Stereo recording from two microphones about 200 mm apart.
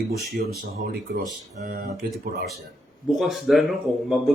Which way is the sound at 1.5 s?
50° right (ahead or behind).